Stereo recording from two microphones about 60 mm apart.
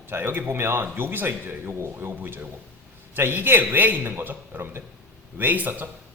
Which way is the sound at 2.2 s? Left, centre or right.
Right.